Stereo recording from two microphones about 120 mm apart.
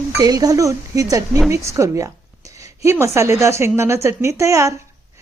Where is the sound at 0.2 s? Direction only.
30° right (ahead or behind).